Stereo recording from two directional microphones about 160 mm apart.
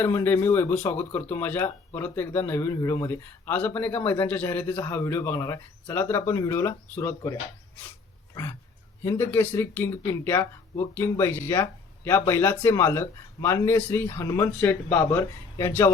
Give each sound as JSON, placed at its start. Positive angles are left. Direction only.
{"t": 0.0, "sound": "speech", "side_deg": 15}
{"t": 9.0, "sound": "speech", "side_deg": 15}